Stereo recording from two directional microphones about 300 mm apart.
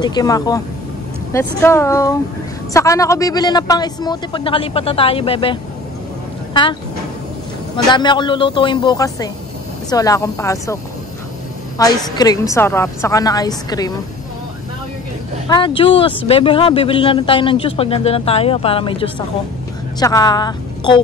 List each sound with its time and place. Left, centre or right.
0.0 s a man's voice: centre
11.8 s a man's voice: centre
15.4 s a man's voice: centre